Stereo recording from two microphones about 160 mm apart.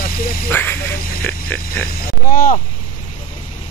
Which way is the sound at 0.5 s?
10° left (ahead or behind).